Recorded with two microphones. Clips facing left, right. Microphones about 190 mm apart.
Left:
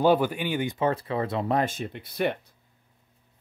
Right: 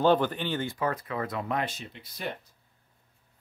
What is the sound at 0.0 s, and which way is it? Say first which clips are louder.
Speech: left 2 dB; 10° left (ahead or behind).